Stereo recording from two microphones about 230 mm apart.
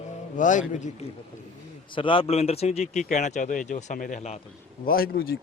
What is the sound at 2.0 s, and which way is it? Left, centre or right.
Speech, left.